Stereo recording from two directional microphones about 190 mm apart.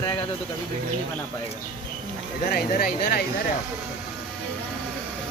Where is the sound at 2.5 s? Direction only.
55° left (ahead or behind).